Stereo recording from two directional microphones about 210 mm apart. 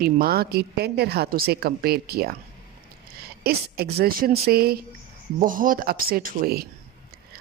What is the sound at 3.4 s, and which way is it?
A woman's voice, 50° right (ahead or behind).